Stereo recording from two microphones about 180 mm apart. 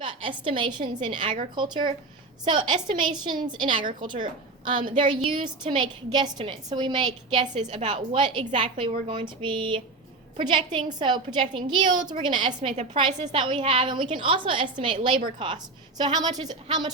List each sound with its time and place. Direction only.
0.0 s a woman's voice: 30° right (ahead or behind)
12.7 s a woman's voice: 35° right (ahead or behind)
13.4 s a woman's voice: 30° right (ahead or behind)